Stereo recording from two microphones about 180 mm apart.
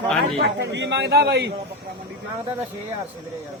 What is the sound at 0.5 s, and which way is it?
Speech, 75° right (ahead or behind).